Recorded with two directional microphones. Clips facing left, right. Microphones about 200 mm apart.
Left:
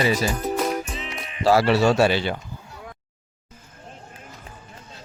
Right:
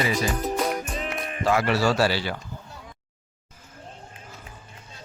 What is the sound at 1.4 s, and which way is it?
Speech, 35° left (ahead or behind).